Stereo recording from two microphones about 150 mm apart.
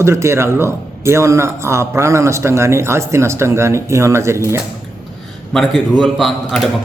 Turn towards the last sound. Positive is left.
turn(degrees=0)  # may be behind; listen again after turning